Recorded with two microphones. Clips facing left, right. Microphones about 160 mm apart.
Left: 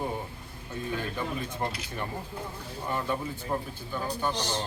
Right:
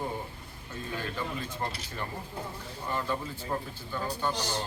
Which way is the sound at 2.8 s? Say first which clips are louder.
Left 2 dB; 15° left (ahead or behind).